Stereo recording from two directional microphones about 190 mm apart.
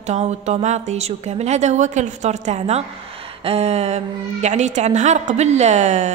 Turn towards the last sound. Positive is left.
turn(degrees=-40)  # may be behind; listen again after turning